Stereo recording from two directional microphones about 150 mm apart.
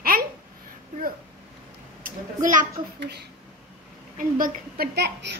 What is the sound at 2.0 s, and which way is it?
A child's voice, 60° right (ahead or behind).